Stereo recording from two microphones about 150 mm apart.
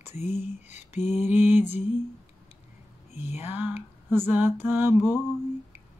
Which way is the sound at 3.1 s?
15° right (ahead or behind).